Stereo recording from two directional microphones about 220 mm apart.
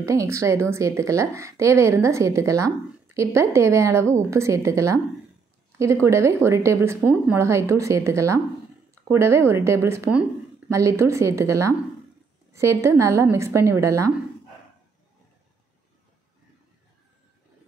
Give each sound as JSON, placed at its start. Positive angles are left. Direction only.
{"t": 0.0, "sound": "a woman's voice", "side_deg": -15}
{"t": 6.0, "sound": "a woman's voice", "side_deg": -10}